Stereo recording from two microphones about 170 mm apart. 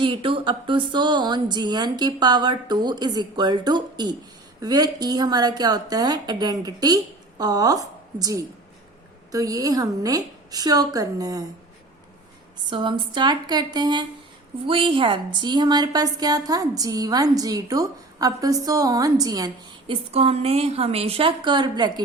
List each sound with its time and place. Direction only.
0.0 s a woman's voice: 30° right (ahead or behind)
12.7 s a woman's voice: 30° right (ahead or behind)
19.9 s a woman's voice: 35° right (ahead or behind)